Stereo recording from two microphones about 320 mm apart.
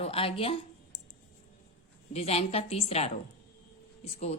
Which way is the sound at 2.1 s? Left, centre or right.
Centre.